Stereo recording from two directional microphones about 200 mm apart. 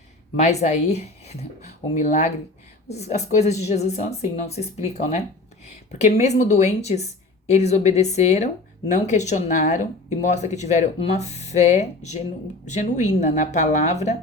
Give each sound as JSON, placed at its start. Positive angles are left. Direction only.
{"t": 0.4, "sound": "speech", "side_deg": 35}